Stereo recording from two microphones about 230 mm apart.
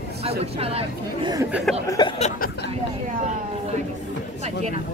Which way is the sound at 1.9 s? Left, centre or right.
Centre.